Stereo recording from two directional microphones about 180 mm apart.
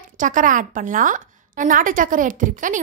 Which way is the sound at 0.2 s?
45° right (ahead or behind).